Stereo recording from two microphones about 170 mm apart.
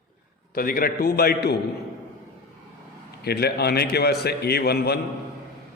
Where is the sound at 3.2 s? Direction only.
70° left (ahead or behind).